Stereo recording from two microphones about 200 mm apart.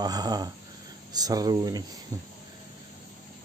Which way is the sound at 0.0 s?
20° right (ahead or behind).